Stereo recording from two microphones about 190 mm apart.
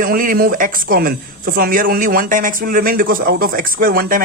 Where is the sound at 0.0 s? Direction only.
50° right (ahead or behind).